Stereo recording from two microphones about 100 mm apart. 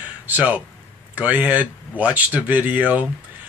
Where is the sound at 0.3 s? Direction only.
15° right (ahead or behind).